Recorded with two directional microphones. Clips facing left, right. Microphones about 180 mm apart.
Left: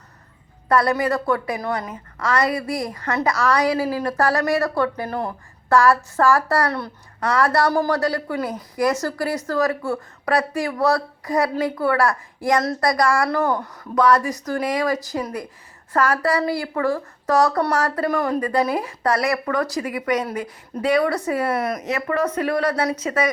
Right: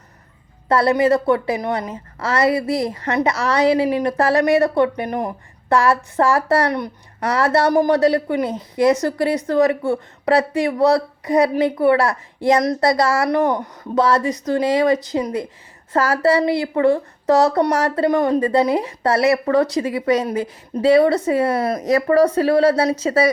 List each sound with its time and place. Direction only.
0.7 s a woman's voice: 25° right (ahead or behind)